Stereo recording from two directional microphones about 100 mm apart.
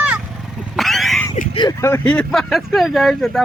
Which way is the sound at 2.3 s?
Centre (ahead or behind).